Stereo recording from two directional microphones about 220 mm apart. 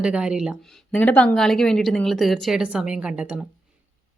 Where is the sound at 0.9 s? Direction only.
5° left (ahead or behind).